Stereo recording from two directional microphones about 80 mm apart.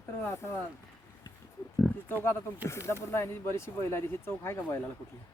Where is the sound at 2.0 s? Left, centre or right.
Left.